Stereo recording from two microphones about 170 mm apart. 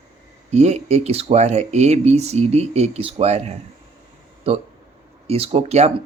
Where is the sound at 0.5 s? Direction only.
40° right (ahead or behind).